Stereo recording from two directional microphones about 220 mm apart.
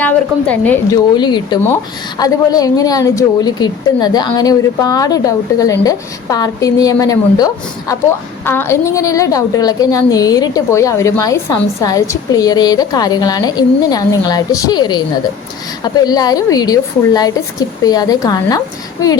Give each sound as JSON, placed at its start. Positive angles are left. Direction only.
{"t": 0.0, "sound": "a woman's voice", "side_deg": 5}
{"t": 1.1, "sound": "a woman's voice", "side_deg": 20}